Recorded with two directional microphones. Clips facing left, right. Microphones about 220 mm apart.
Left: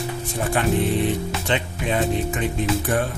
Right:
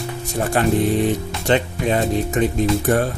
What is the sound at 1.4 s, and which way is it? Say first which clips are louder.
Speech: right 8 dB; 40° right (ahead or behind).